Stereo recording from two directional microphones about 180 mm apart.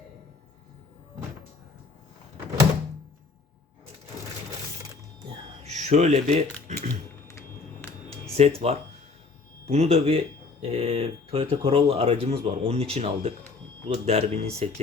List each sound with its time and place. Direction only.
5.6 s speech: 40° right (ahead or behind)
7.3 s a sound: 15° left (ahead or behind)
8.4 s speech: 35° right (ahead or behind)